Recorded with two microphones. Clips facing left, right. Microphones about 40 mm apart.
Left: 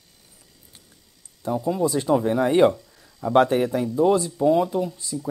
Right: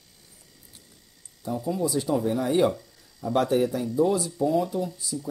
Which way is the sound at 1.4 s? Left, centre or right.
Left.